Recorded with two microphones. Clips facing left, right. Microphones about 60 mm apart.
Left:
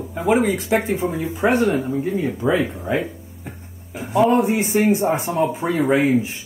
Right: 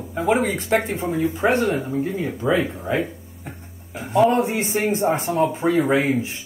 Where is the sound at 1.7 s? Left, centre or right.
Centre.